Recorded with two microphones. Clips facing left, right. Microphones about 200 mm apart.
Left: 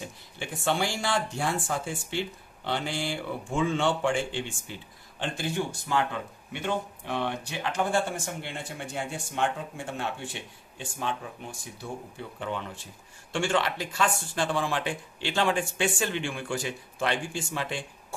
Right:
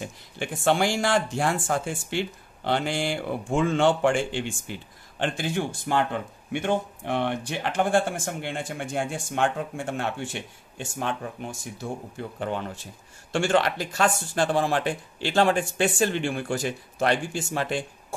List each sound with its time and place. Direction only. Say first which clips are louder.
0.4 s a man's voice: right 5 dB; 65° right (ahead or behind)
1.0 s a man's voice: right 5 dB; 50° right (ahead or behind)
2.9 s speech: right 5 dB; 75° right (ahead or behind)
3.3 s speech: right 3 dB; 50° right (ahead or behind)
5.2 s a man's voice: right 3 dB; 80° right; by 17.7 s 45° right (ahead or behind)